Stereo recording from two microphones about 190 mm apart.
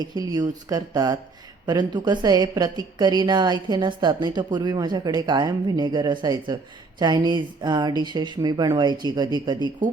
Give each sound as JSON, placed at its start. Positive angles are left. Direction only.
{"t": 0.0, "sound": "a woman's voice", "side_deg": -20}